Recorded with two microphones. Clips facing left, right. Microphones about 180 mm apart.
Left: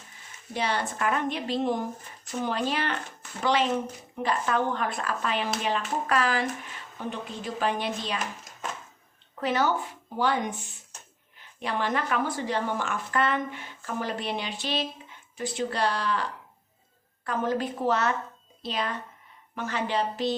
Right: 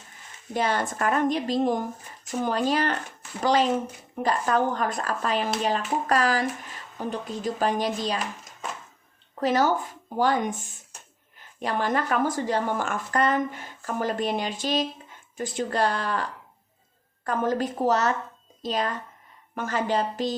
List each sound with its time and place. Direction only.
0.5 s a woman's voice: 45° right (ahead or behind)
9.4 s a woman's voice: 40° right (ahead or behind)
17.2 s a woman's voice: 45° right (ahead or behind)